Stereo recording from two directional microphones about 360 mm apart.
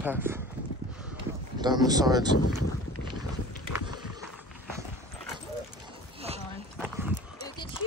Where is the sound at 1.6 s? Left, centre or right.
Centre.